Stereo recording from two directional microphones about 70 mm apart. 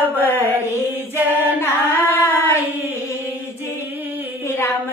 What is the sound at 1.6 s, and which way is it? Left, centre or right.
Singing, left.